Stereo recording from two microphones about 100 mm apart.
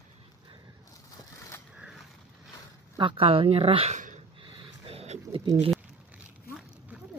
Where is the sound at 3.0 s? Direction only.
60° right (ahead or behind).